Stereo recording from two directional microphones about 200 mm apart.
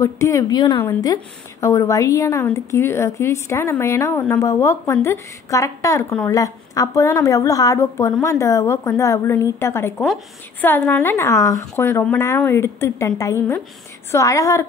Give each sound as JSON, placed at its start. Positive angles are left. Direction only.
{"t": 0.0, "sound": "a woman's voice", "side_deg": 15}